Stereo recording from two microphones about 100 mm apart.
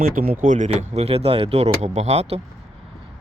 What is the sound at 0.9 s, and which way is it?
Speech, 90° right.